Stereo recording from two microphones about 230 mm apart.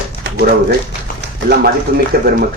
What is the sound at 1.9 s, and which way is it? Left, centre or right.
Speech, right.